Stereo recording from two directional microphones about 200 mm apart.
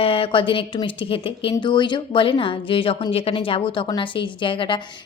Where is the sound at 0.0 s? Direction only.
30° left (ahead or behind).